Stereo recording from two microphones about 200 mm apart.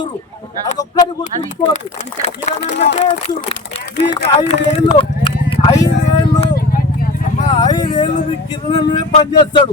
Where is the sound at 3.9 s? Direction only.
60° left (ahead or behind).